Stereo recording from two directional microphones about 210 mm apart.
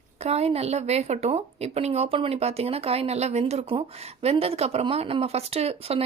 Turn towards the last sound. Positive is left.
turn(degrees=-30)  # may be behind; listen again after turning